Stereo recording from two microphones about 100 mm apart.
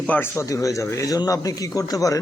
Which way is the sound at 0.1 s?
20° left (ahead or behind).